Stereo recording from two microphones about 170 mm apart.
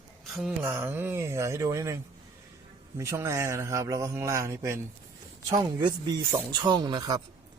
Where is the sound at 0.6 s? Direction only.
15° right (ahead or behind).